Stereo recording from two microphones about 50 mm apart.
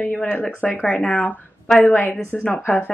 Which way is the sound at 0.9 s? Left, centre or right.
Left.